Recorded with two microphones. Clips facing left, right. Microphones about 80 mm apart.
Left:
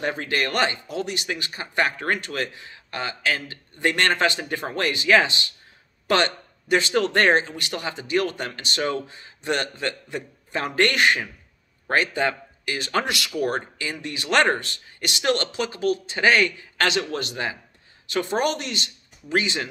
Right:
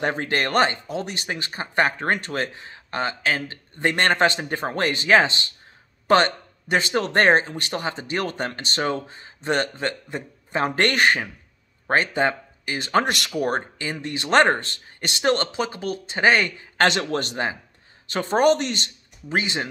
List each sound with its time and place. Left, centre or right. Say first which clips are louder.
0.0 s speech: right 2 dB; right
13.0 s speech: right 3 dB; right
13.5 s speech: right 2 dB; right
16.8 s speech: right 3 dB; right
19.2 s speech: left 1 dB; right